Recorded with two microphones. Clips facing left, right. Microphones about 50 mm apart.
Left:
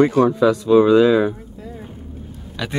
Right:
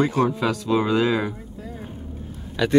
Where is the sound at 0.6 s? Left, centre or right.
Right.